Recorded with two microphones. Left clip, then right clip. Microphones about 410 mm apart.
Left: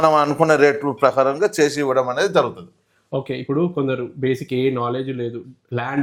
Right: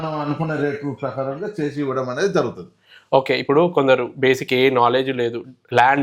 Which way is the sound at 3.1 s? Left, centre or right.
Right.